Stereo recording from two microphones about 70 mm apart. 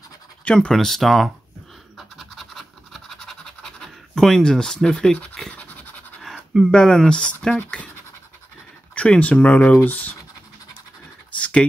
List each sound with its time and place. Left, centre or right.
0.5 s speech: centre
2.0 s scratch: centre; by 6.2 s left
6.3 s a sound: centre
6.7 s speech: centre
8.9 s speech: centre
11.3 s computer keyboard: centre